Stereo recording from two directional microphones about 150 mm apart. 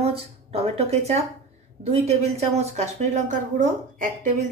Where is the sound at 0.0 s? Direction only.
45° right (ahead or behind).